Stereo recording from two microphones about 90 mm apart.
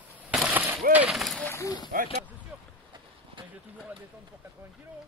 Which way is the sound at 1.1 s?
Centre (ahead or behind).